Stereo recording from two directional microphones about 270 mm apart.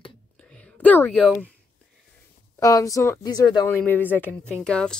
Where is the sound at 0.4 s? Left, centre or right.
Centre.